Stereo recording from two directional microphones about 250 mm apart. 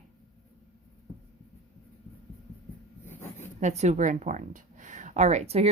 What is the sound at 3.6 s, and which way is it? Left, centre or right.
Speech, right.